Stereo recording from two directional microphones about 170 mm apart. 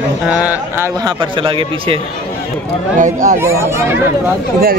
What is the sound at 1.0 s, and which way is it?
Speech, 30° right (ahead or behind).